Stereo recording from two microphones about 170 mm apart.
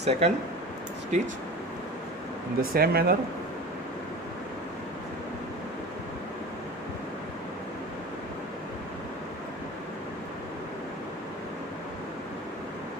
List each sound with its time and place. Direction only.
0.0 s speech: 40° right (ahead or behind)
2.6 s speech: 65° right (ahead or behind)